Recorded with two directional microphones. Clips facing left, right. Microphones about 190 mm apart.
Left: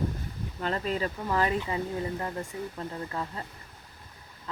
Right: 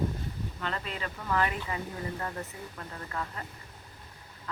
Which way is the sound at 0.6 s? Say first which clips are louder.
Left 8 dB; 40° left (ahead or behind).